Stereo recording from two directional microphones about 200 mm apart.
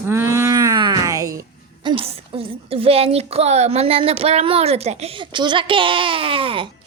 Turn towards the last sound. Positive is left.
turn(degrees=-25)  # may be behind; listen again after turning